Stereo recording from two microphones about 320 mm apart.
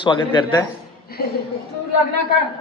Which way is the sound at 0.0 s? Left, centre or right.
Centre.